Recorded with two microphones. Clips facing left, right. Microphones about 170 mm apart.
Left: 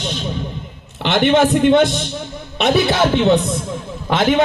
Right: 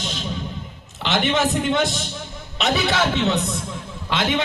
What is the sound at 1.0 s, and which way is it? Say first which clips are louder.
A man's voice: left 7 dB; 55° left (ahead or behind).